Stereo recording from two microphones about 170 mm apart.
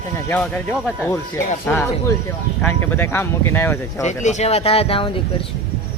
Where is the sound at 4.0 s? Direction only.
45° left (ahead or behind).